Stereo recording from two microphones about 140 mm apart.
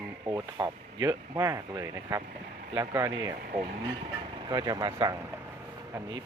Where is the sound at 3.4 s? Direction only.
90° right.